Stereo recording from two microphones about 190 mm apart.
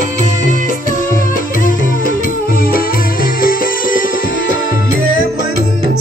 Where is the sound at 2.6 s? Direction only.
50° left (ahead or behind).